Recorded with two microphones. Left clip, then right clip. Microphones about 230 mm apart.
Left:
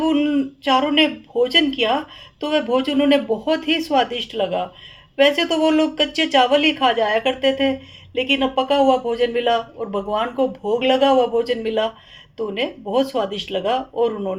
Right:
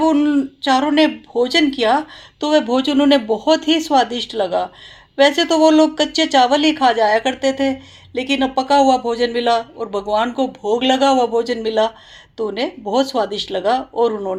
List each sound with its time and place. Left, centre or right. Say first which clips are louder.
0.1 s speech: right 3 dB; right
0.6 s speech: right 2 dB; right